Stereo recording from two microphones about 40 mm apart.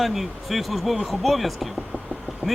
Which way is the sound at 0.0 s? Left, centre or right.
Centre.